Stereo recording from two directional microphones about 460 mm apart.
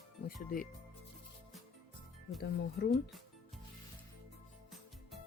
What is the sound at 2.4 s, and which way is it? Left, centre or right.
Speech, left.